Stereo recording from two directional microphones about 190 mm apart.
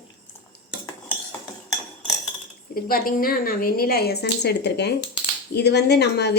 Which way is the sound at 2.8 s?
50° left (ahead or behind).